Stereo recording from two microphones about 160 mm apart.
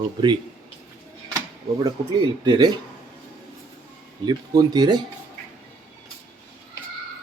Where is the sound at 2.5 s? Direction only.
25° right (ahead or behind).